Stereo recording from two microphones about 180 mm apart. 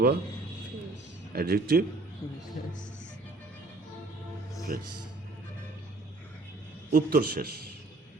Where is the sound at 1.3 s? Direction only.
60° right (ahead or behind).